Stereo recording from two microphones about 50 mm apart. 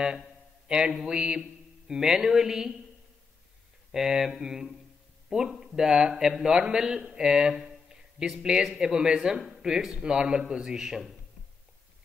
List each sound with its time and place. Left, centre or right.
0.7 s speech: centre
1.9 s speech: centre
3.9 s speech: centre
7.0 s a sound: centre
8.4 s speech: centre